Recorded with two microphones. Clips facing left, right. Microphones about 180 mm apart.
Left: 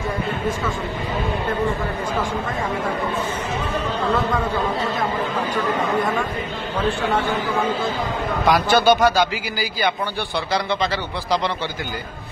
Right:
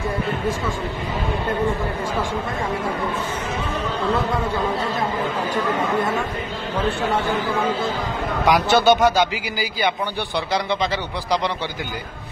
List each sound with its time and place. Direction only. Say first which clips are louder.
8.5 s a man's voice: even; 20° right (ahead or behind)